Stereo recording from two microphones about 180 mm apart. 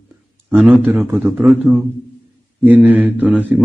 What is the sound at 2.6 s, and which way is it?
Speech, 5° right (ahead or behind).